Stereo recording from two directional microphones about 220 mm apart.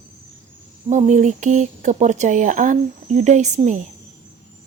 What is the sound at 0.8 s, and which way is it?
Speech, 35° right (ahead or behind).